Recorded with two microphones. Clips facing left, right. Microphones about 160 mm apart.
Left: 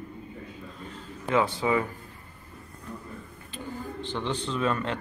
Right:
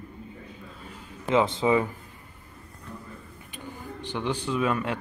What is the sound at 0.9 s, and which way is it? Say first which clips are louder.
Speech: right 2 dB; 20° right (ahead or behind).